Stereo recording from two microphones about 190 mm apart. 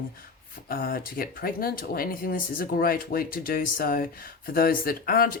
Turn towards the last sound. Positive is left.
turn(degrees=50)  # may be behind; listen again after turning